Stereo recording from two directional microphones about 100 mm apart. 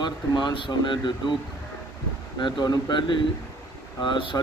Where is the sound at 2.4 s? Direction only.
50° left (ahead or behind).